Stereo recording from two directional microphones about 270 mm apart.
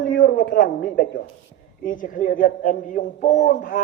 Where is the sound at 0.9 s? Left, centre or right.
Left.